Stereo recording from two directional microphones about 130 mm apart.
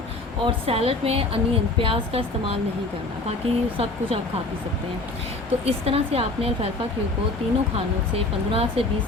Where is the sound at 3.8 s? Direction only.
45° right (ahead or behind).